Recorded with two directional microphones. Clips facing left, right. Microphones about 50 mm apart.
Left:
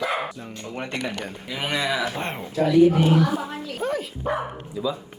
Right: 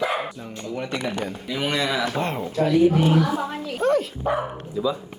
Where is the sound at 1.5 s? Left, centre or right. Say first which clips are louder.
Right 1 dB; centre.